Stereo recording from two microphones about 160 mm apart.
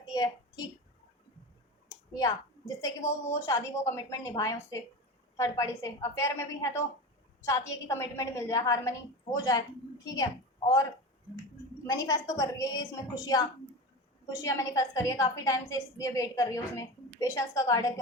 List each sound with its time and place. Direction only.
0.0 s a sound: 25° left (ahead or behind)
1.9 s a woman's voice: 20° left (ahead or behind)
11.9 s a woman's voice: 20° left (ahead or behind)